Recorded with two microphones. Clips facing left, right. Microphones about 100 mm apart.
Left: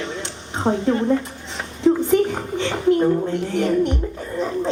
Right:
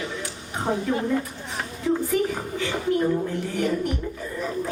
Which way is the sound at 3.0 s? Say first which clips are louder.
Left 5 dB; 25° left (ahead or behind).